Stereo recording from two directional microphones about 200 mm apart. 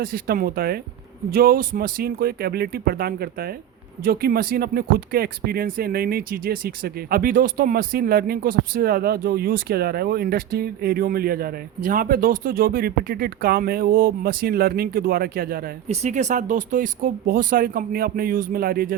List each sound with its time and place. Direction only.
0.0 s speech: 50° right (ahead or behind)
15.9 s speech: 35° right (ahead or behind)